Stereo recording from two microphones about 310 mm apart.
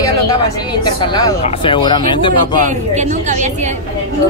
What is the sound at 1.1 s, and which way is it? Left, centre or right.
Speech, centre.